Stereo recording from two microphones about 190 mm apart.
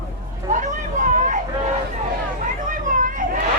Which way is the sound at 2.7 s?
45° right (ahead or behind).